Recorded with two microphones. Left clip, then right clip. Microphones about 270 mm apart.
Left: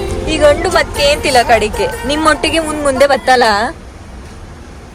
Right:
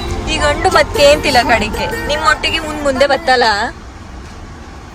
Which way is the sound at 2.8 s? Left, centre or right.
Centre.